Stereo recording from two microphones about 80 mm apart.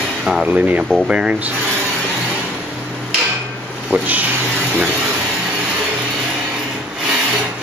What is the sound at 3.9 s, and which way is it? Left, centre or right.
Speech, right.